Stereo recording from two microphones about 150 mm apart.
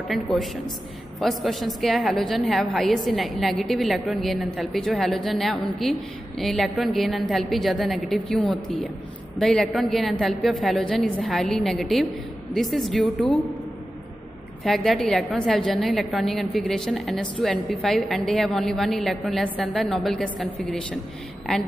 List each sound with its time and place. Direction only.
0.1 s a woman's voice: centre (ahead or behind)
14.6 s a woman's voice: centre (ahead or behind)
21.5 s a woman's voice: 5° left (ahead or behind)